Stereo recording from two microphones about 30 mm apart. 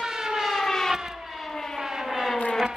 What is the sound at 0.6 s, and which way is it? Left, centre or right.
Civil defense siren, centre.